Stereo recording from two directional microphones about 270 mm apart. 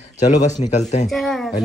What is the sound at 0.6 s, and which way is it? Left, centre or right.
Speech, left.